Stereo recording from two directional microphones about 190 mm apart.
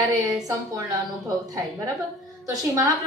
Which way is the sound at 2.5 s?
15° right (ahead or behind).